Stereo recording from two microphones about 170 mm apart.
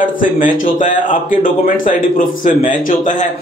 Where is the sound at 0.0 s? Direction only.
50° left (ahead or behind).